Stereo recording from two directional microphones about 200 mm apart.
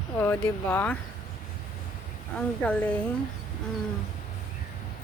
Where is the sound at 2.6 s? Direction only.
5° left (ahead or behind).